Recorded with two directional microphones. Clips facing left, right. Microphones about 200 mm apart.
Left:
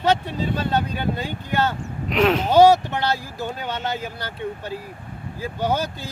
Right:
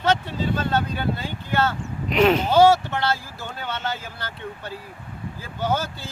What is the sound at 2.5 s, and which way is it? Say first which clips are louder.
Speech: left 2 dB; 15° left (ahead or behind).